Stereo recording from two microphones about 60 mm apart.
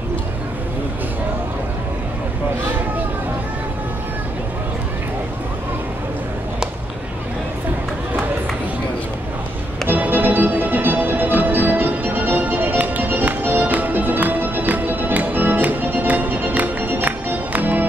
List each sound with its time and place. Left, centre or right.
9.8 s music: right